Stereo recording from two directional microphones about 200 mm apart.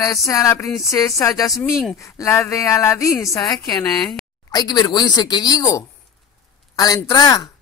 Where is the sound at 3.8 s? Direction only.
5° left (ahead or behind).